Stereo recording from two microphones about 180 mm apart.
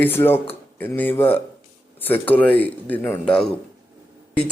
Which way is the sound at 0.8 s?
10° left (ahead or behind).